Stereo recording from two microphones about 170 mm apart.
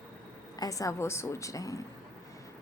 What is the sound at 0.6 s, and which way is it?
A woman's voice, 20° left (ahead or behind).